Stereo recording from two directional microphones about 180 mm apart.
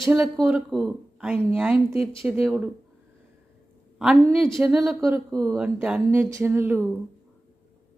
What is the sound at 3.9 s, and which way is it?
Speech, centre (ahead or behind).